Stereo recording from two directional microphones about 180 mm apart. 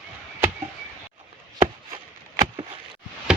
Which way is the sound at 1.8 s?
30° right (ahead or behind).